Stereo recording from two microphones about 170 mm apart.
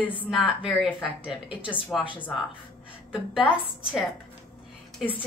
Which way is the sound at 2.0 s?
30° left (ahead or behind).